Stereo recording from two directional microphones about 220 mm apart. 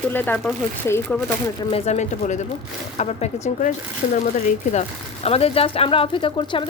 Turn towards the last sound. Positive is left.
turn(degrees=20)  # may be behind; listen again after turning